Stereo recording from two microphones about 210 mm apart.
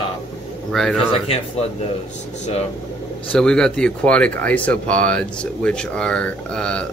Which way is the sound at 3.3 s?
5° left (ahead or behind).